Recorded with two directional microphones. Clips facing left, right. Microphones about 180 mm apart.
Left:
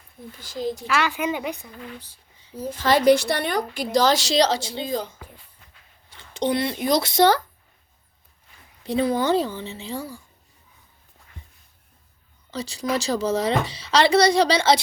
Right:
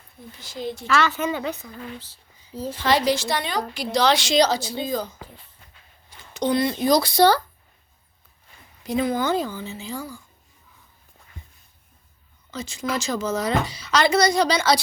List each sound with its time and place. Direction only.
0.3 s speech: 45° left (ahead or behind)
0.9 s a woman's voice: 10° left (ahead or behind)
2.8 s a woman's voice: 55° left (ahead or behind)
3.9 s a woman's voice: 45° left (ahead or behind); by 4.9 s 25° left (ahead or behind)
6.1 s a sound: 25° left (ahead or behind)
6.8 s a woman's voice: 25° left (ahead or behind)
8.8 s speech: 30° left (ahead or behind)
12.5 s speech: 35° left (ahead or behind)